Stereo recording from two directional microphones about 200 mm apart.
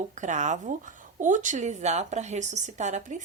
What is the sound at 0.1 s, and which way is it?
Speech, 40° right (ahead or behind).